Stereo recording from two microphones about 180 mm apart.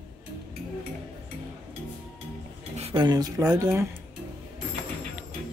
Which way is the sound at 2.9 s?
20° right (ahead or behind).